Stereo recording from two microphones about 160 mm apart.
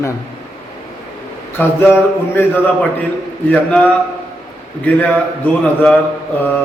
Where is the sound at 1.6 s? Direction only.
15° left (ahead or behind).